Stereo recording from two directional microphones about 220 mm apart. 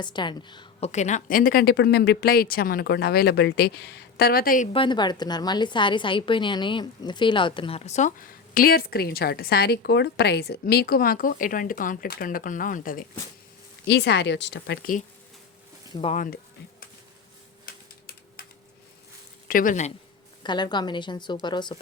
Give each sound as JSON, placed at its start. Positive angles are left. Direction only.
{"t": 0.0, "sound": "a woman's voice", "side_deg": 20}
{"t": 4.7, "sound": "a woman's voice", "side_deg": 20}
{"t": 8.5, "sound": "a woman's voice", "side_deg": 40}
{"t": 13.8, "sound": "a woman's voice", "side_deg": 50}
{"t": 15.9, "sound": "speech", "side_deg": 25}
{"t": 17.7, "sound": "typing", "side_deg": 45}
{"t": 19.5, "sound": "speech", "side_deg": 40}
{"t": 20.4, "sound": "a woman's voice", "side_deg": 20}